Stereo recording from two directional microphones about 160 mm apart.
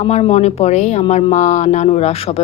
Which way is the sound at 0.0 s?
35° left (ahead or behind).